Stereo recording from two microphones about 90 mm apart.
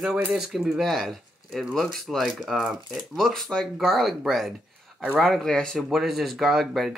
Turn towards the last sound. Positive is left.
turn(degrees=0)  # may be behind; listen again after turning